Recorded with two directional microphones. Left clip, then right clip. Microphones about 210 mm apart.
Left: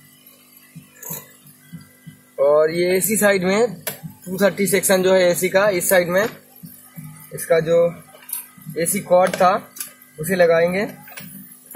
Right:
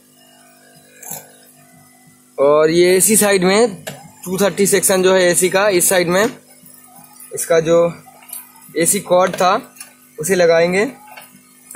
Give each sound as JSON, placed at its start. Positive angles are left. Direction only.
{"t": 2.3, "sound": "speech", "side_deg": -35}
{"t": 7.3, "sound": "speech", "side_deg": -40}